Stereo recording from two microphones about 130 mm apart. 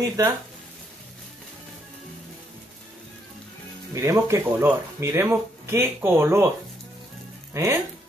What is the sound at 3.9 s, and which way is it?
Speech, 25° right (ahead or behind).